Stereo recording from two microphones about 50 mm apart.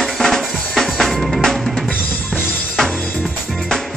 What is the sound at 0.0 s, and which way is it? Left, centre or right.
Drum, centre.